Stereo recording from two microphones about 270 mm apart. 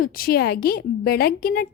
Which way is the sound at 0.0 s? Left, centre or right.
Left.